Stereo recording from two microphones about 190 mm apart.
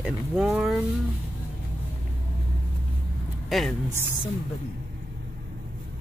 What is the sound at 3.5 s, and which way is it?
Speech, centre (ahead or behind).